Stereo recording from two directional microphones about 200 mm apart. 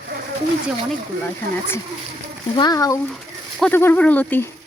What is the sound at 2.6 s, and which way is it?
Speech, 20° left (ahead or behind).